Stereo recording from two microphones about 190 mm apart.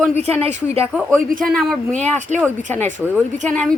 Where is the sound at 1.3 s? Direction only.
45° right (ahead or behind).